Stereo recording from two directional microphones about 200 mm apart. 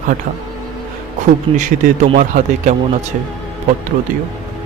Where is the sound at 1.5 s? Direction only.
25° right (ahead or behind).